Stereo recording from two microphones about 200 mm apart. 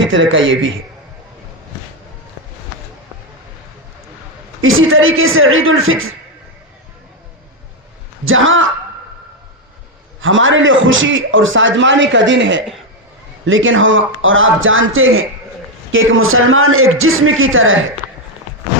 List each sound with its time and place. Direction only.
0.0 s a man's voice: 70° right (ahead or behind)
4.6 s a man's voice: 85° right
8.2 s a man's voice: 80° right
10.2 s a man's voice: 75° right (ahead or behind)